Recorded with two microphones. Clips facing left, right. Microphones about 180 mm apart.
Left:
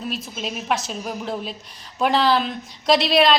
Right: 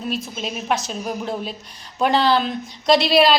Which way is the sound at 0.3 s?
Centre (ahead or behind).